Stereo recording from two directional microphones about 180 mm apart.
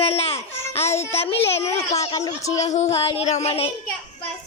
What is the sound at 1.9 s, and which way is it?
Music, 35° left (ahead or behind).